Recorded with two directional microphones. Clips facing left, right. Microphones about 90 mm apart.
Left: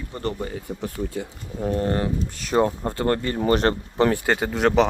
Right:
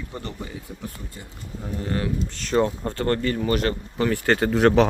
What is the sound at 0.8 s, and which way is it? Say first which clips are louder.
Speech: left 9 dB; 90° left.